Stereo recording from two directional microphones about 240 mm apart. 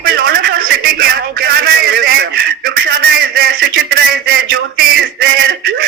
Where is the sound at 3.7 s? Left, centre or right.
Right.